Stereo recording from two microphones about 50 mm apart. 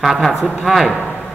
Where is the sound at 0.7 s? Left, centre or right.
Centre.